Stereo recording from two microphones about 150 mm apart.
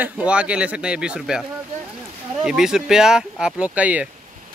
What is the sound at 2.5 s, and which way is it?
Speech, 5° right (ahead or behind).